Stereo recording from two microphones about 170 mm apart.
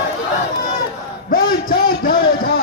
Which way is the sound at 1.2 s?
60° left (ahead or behind).